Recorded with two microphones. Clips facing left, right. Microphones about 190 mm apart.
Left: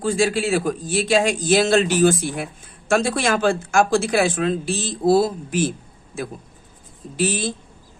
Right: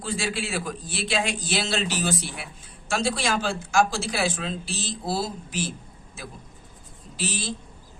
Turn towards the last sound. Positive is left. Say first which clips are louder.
# left 8 dB
turn(degrees=50)  # may be behind; listen again after turning